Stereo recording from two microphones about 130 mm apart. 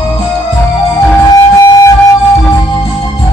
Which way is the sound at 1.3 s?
30° left (ahead or behind).